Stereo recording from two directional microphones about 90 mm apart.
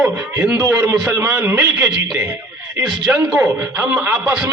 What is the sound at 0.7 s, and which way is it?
A man's voice, 20° right (ahead or behind).